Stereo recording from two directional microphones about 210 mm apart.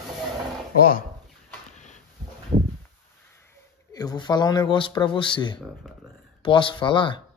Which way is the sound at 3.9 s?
20° left (ahead or behind).